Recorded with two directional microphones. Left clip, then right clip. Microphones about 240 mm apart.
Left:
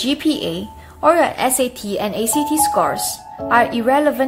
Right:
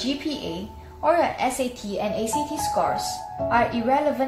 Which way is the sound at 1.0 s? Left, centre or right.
Left.